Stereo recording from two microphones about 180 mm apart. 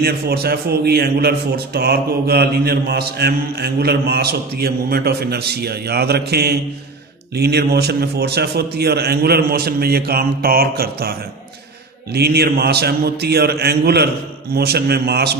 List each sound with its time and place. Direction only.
0.0 s a man's voice: 60° right (ahead or behind)